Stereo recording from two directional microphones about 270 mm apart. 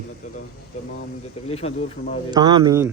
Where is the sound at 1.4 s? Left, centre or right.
Left.